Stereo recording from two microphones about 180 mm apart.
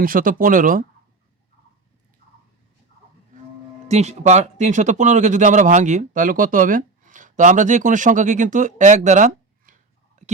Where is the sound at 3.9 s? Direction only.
40° right (ahead or behind).